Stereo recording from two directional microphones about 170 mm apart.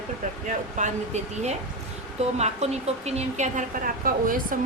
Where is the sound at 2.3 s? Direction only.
40° right (ahead or behind).